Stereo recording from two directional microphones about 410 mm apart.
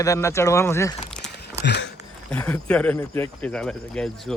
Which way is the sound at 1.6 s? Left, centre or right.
Left.